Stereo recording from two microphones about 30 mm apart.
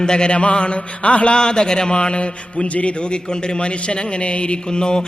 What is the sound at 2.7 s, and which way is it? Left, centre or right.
Speech, left.